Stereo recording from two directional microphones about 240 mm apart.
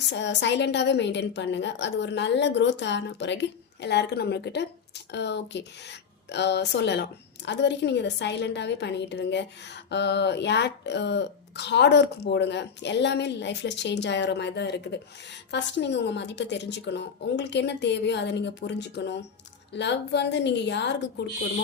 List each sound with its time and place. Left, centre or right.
0.1 s speech: left